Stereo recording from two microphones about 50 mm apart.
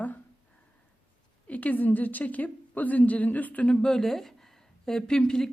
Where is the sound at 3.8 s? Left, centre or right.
Centre.